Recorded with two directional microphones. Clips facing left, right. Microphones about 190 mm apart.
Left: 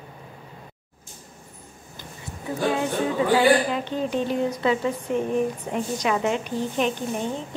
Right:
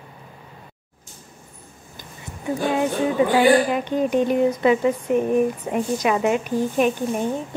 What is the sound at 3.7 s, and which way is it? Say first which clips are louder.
A woman's voice: right 5 dB; 15° right (ahead or behind).